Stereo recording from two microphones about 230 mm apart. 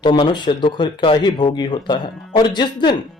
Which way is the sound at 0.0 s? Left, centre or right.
Centre.